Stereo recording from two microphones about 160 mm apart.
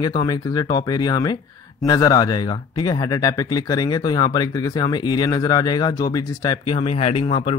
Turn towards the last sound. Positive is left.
turn(degrees=35)  # may be behind; listen again after turning